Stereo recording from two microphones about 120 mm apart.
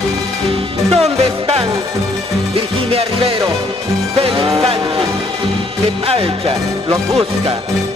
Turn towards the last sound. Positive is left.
turn(degrees=-55)  # may be behind; listen again after turning